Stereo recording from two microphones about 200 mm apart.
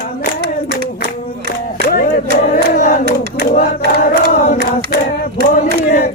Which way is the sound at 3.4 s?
45° left (ahead or behind).